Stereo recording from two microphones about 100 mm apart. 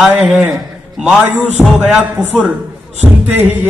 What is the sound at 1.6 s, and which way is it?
Speech, 10° right (ahead or behind).